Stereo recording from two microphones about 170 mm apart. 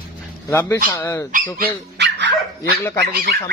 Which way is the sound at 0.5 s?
15° left (ahead or behind).